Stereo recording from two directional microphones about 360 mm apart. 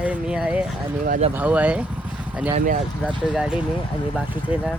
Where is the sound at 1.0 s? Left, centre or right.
Right.